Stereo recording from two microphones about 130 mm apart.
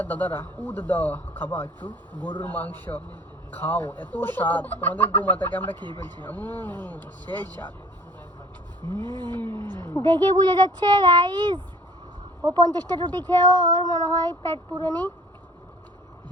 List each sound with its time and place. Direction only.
0.0 s speech: 15° left (ahead or behind)
5.7 s speech: 35° right (ahead or behind)
6.2 s speech: 15° left (ahead or behind)
8.8 s speech: 35° right (ahead or behind)